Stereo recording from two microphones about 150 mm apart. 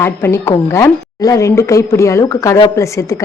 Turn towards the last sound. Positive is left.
turn(degrees=20)  # may be behind; listen again after turning